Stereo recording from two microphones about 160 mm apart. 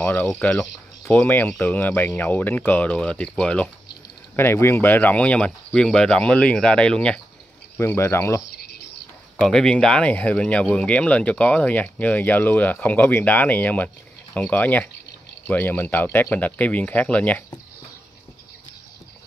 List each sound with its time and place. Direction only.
0.0 s speech: 10° left (ahead or behind)
9.4 s speech: 5° left (ahead or behind)